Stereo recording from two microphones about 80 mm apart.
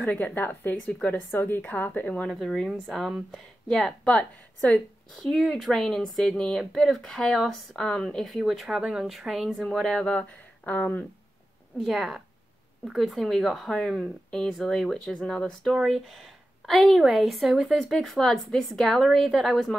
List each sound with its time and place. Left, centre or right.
0.0 s speech: left
2.2 s speech: centre
5.1 s speech: centre
11.8 s speech: centre